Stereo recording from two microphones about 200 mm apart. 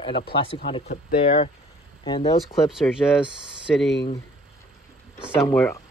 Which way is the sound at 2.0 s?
25° left (ahead or behind).